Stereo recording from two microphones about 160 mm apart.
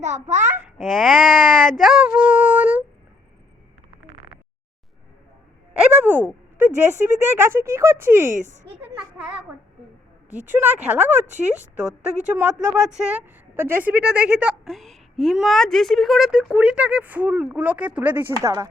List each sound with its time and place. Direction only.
0.0 s a child's voice: 50° right (ahead or behind)
0.8 s a sound: centre (ahead or behind)
2.0 s a woman's voice: 10° right (ahead or behind)
5.7 s a woman's voice: 10° right (ahead or behind)
8.4 s a child's voice: 50° right (ahead or behind)
10.5 s a woman's voice: 10° right (ahead or behind)